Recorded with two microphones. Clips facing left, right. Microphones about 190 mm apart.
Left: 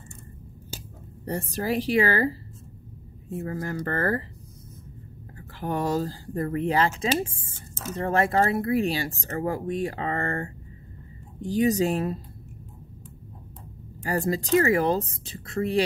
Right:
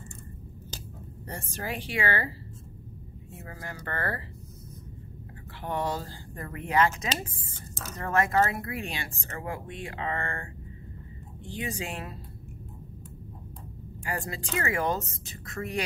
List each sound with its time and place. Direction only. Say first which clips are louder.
1.2 s speech: left 8 dB; 35° left (ahead or behind)
3.4 s speech: left 9 dB; 45° left (ahead or behind)
5.6 s speech: left 5 dB; 40° left (ahead or behind)
14.0 s speech: left 9 dB; 40° left (ahead or behind)